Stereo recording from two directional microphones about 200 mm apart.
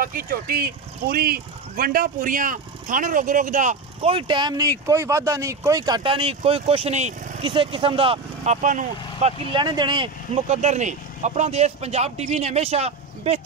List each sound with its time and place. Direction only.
0.0 s speech: 45° right (ahead or behind)
4.1 s speech: 25° right (ahead or behind)
8.6 s speech: 40° right (ahead or behind)